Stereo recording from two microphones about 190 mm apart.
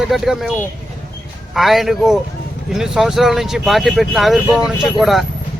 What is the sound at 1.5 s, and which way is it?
Speech, centre (ahead or behind).